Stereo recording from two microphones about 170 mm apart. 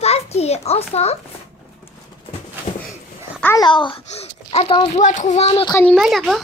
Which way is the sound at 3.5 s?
25° left (ahead or behind).